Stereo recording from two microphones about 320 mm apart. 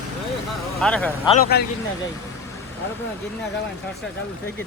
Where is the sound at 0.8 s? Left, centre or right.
Centre.